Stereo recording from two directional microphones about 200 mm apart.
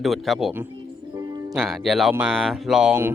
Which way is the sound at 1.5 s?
Centre (ahead or behind).